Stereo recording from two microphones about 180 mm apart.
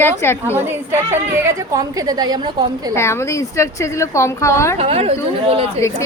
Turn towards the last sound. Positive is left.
turn(degrees=-35)  # may be behind; listen again after turning